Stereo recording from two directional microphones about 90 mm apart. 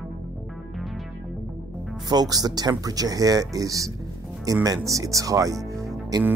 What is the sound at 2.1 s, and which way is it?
Speech, 45° right (ahead or behind).